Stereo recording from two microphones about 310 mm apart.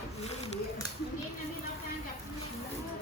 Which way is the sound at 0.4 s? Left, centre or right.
Centre.